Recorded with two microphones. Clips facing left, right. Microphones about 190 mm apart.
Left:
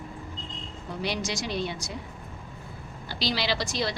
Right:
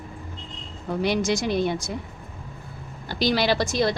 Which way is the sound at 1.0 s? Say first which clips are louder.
Right 8 dB; 50° right (ahead or behind).